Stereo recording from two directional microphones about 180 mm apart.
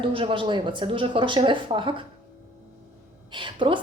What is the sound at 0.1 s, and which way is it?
A woman's voice, 30° right (ahead or behind).